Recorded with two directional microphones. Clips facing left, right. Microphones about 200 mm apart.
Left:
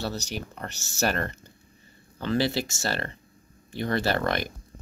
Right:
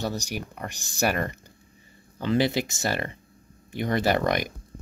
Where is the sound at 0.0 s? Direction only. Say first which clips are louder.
Right 2 dB; 15° right (ahead or behind).